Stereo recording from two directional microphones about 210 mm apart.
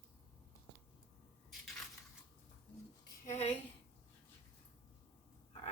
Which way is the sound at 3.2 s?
30° left (ahead or behind).